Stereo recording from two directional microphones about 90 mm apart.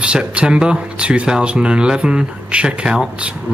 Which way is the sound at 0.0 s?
10° right (ahead or behind).